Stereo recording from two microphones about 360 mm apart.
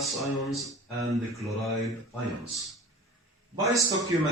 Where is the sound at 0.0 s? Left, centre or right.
Centre.